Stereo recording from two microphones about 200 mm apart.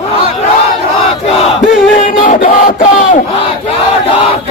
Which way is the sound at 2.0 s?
40° left (ahead or behind).